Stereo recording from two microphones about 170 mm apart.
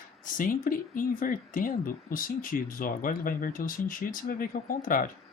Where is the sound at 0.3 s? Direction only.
55° left (ahead or behind).